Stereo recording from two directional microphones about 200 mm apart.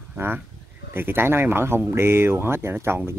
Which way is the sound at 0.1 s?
10° right (ahead or behind).